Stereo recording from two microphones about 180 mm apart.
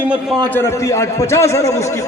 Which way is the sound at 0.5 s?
15° left (ahead or behind).